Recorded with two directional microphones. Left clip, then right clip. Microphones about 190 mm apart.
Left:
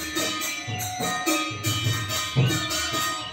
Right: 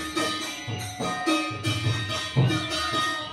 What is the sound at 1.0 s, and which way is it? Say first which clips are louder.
Music: even; 45° left (ahead or behind).